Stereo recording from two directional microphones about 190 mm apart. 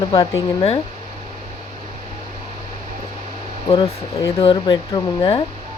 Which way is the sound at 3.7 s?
20° left (ahead or behind).